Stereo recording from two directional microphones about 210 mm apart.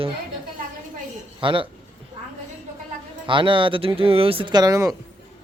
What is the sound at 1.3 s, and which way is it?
Speech, 25° right (ahead or behind).